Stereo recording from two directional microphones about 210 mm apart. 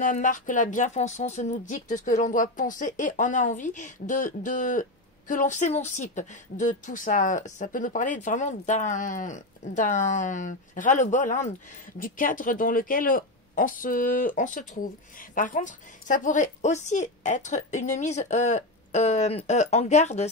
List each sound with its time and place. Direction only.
0.0 s speech: 35° left (ahead or behind)